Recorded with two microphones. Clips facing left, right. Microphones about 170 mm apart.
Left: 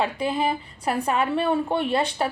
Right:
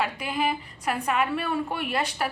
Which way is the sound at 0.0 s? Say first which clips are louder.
Left 3 dB; 30° left (ahead or behind).